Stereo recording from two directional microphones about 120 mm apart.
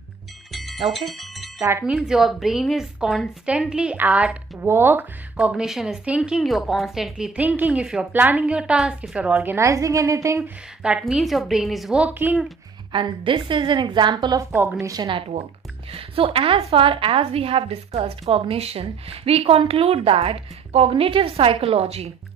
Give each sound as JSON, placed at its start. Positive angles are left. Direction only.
{"t": 0.5, "sound": "bicycle bell", "side_deg": 0}
{"t": 1.6, "sound": "a woman's voice", "side_deg": -20}
{"t": 1.9, "sound": "a woman's voice", "side_deg": -5}
{"t": 9.7, "sound": "a woman's voice", "side_deg": -25}
{"t": 10.8, "sound": "a woman's voice", "side_deg": -10}
{"t": 12.9, "sound": "a woman's voice", "side_deg": -45}
{"t": 14.5, "sound": "a woman's voice", "side_deg": -15}
{"t": 14.8, "sound": "a woman's voice", "side_deg": -30}
{"t": 15.0, "sound": "a woman's voice", "side_deg": -55}